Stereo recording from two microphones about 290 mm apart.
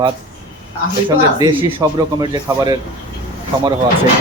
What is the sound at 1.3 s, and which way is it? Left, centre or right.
Speech, centre.